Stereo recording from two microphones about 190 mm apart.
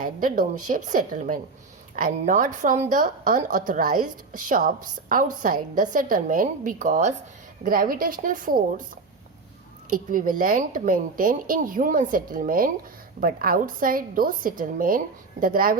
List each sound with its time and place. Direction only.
0.0 s a woman's voice: 45° right (ahead or behind)
9.9 s a woman's voice: 45° right (ahead or behind)